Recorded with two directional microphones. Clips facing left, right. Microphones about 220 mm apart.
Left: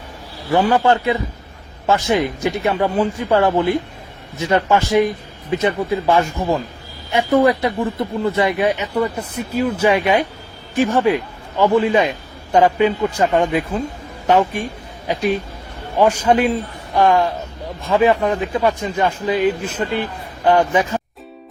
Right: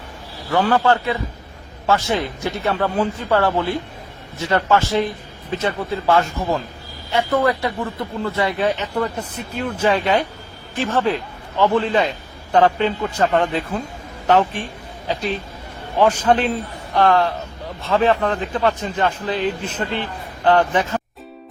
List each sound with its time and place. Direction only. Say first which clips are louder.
0.5 s a man's voice: left 2 dB; 15° left (ahead or behind)